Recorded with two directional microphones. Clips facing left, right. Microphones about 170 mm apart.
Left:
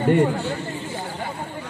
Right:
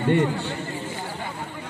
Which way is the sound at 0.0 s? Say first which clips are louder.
Left 3 dB; 45° left (ahead or behind).